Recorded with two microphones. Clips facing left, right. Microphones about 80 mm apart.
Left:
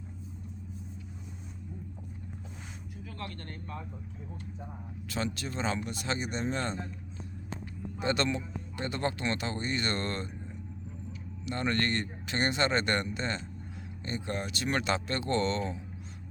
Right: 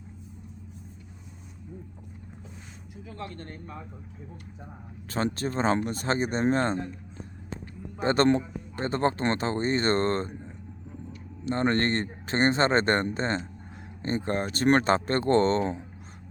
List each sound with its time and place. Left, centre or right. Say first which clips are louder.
3.1 s a man's voice: right 4 dB; centre
5.0 s speech: right 6 dB; right
7.9 s speech: right 8 dB; right
11.4 s speech: right 6 dB; right